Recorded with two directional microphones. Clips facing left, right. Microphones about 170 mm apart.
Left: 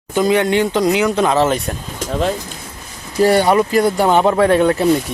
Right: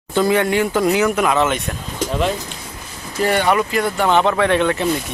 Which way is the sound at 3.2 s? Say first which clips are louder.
Left 5 dB; 35° left (ahead or behind).